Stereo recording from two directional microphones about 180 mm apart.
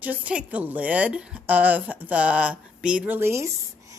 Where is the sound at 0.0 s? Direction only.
10° right (ahead or behind).